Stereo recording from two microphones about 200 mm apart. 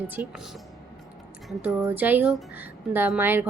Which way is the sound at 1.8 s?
10° right (ahead or behind).